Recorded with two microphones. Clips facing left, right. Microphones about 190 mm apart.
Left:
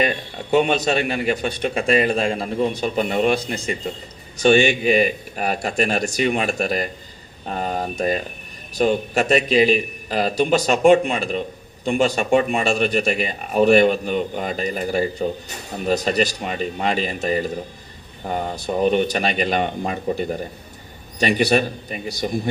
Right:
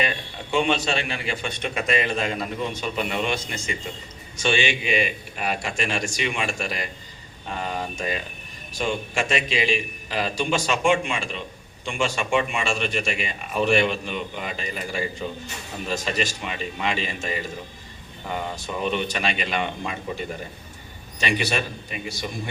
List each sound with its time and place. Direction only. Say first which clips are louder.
0.0 s speech: left 6 dB; 40° left (ahead or behind)